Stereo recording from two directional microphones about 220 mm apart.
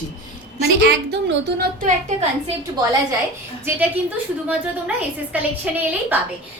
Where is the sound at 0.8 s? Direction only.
50° right (ahead or behind).